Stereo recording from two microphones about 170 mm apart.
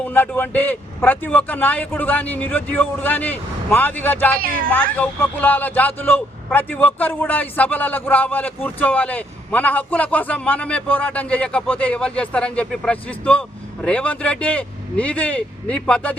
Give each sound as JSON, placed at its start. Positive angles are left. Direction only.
{"t": 0.0, "sound": "a man's voice", "side_deg": 10}
{"t": 4.4, "sound": "speech", "side_deg": -55}
{"t": 4.7, "sound": "a man's voice", "side_deg": 10}